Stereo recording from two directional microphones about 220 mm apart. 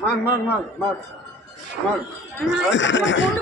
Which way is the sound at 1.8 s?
Centre (ahead or behind).